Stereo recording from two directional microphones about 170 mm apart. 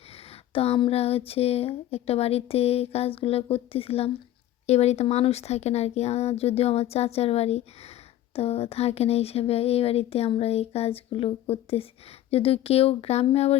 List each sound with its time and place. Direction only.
0.5 s a woman's voice: 35° left (ahead or behind)